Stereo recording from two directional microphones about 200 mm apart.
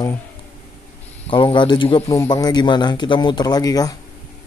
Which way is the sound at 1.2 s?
25° left (ahead or behind).